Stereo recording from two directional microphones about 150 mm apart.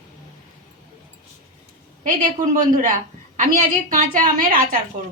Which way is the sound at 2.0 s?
65° right (ahead or behind).